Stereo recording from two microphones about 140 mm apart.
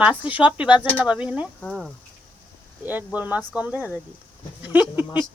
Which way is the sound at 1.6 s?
5° left (ahead or behind).